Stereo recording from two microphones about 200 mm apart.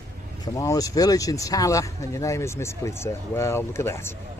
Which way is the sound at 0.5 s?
15° left (ahead or behind).